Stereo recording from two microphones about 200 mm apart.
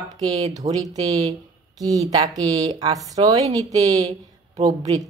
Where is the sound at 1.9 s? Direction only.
20° right (ahead or behind).